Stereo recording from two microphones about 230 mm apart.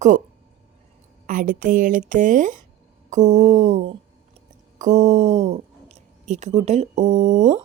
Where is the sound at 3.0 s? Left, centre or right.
Right.